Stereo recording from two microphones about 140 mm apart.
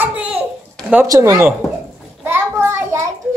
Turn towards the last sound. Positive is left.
turn(degrees=-10)  # may be behind; listen again after turning